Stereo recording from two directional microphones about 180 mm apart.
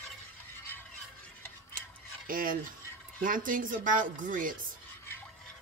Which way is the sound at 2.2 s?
50° right (ahead or behind).